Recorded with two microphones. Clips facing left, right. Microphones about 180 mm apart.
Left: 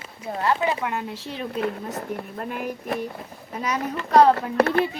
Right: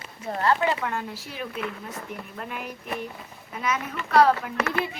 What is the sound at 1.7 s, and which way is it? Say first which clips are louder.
A child's voice: left 6 dB; 45° left (ahead or behind).